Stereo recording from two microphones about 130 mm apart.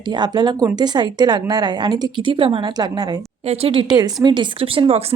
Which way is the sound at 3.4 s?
50° right (ahead or behind).